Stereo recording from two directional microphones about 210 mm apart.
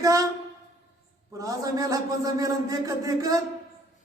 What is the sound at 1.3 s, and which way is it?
A woman's voice, 15° right (ahead or behind).